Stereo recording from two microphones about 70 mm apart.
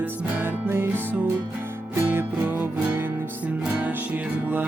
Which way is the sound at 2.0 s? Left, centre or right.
Right.